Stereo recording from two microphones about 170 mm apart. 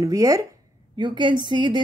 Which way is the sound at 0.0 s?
20° right (ahead or behind).